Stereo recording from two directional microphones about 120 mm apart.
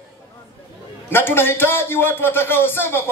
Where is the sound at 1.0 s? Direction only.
20° left (ahead or behind).